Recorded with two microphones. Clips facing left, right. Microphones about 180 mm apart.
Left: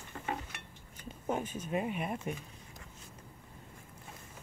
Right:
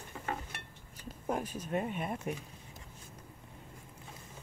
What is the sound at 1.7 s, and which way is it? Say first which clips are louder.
Speech: even; 5° left (ahead or behind).